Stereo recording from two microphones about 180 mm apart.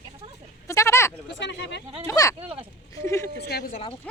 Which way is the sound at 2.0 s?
20° left (ahead or behind).